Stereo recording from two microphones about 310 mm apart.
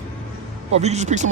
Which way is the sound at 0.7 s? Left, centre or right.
Right.